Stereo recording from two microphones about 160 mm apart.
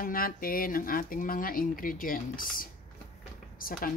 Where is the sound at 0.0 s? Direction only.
65° left (ahead or behind).